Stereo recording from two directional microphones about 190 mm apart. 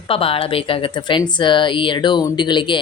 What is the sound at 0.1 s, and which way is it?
Speech, 30° left (ahead or behind).